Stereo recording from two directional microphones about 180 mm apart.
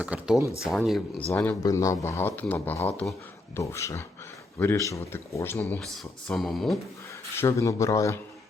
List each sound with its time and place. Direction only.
0.0 s speech: 5° right (ahead or behind)
1.3 s speech: 15° left (ahead or behind)
7.3 s speech: 15° left (ahead or behind)